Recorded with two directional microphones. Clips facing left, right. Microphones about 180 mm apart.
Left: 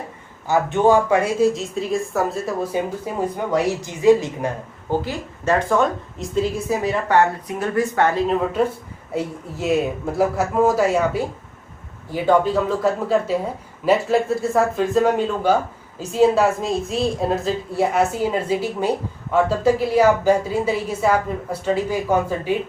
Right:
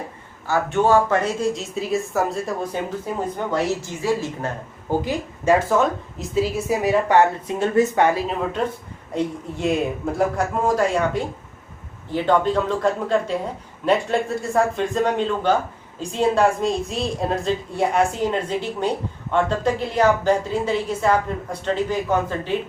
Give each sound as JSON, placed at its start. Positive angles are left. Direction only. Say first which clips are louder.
{"t": 0.4, "sound": "a woman's voice", "louder": "left 3 dB", "side_deg": 15}
{"t": 3.5, "sound": "a woman's voice", "louder": "left 2 dB", "side_deg": 15}
{"t": 4.9, "sound": "a woman's voice", "louder": "right 1 dB", "side_deg": -10}
{"t": 7.1, "sound": "a woman's voice", "louder": "right 1 dB", "side_deg": -25}
{"t": 8.3, "sound": "a woman's voice", "louder": "left 4 dB", "side_deg": 5}